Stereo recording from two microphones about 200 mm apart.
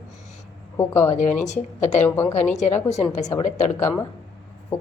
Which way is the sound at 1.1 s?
35° left (ahead or behind).